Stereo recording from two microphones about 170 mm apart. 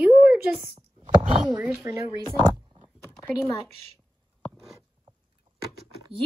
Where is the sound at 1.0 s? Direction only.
30° right (ahead or behind).